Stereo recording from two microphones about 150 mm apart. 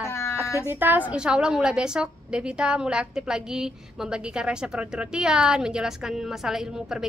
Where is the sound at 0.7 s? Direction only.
15° right (ahead or behind).